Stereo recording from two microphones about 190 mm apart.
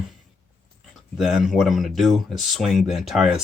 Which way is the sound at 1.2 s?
Centre (ahead or behind).